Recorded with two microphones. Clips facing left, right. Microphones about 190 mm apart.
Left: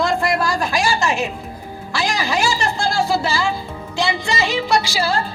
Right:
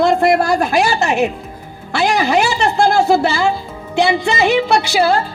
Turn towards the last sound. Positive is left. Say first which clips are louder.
# right 5 dB
turn(degrees=-60)  # may be behind; listen again after turning